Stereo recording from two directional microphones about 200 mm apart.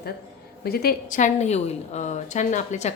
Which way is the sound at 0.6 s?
50° left (ahead or behind).